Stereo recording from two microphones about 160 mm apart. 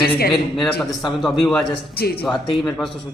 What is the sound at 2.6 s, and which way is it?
Speech, 5° left (ahead or behind).